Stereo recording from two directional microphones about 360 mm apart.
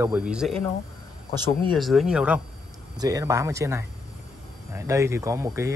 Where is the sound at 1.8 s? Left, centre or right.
Centre.